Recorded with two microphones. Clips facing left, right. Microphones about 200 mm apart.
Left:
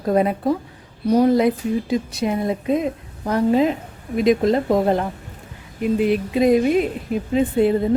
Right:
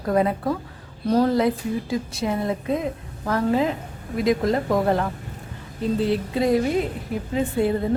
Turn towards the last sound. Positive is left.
turn(degrees=20)  # may be behind; listen again after turning